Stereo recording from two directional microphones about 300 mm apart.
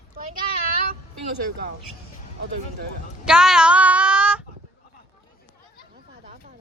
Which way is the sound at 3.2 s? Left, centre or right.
Centre.